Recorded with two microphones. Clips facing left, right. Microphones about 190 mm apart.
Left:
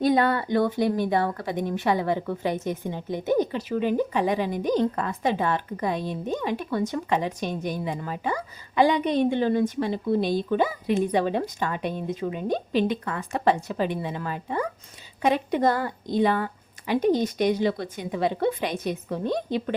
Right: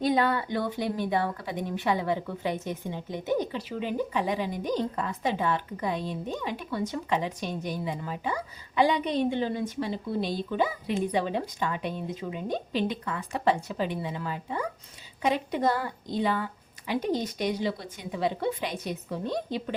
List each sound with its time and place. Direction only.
0.0 s a woman's voice: 45° left (ahead or behind)